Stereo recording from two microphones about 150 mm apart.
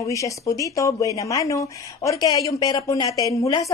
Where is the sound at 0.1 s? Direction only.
20° left (ahead or behind).